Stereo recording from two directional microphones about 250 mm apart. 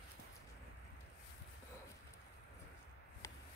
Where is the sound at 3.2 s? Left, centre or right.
Centre.